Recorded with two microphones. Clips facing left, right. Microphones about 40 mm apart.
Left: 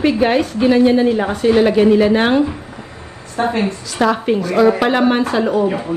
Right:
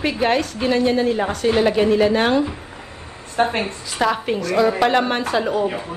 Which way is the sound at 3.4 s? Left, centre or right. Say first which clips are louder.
Left 2 dB; right.